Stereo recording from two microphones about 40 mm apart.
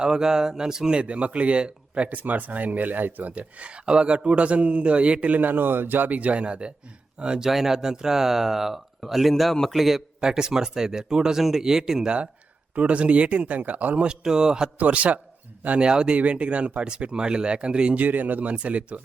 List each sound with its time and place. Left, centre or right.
0.0 s speech: centre
1.0 s speech: right
2.0 s speech: right
5.3 s speech: right
6.1 s speech: right; by 10.0 s centre
10.2 s speech: centre
12.0 s speech: right
14.0 s speech: right
14.8 s speech: right
15.8 s speech: right
16.1 s speech: right
18.0 s speech: right
18.5 s speech: right